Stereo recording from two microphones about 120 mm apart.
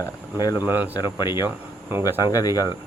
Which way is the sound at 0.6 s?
15° right (ahead or behind).